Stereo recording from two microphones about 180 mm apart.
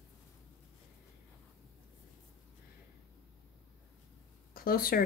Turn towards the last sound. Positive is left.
turn(degrees=55)  # may be behind; listen again after turning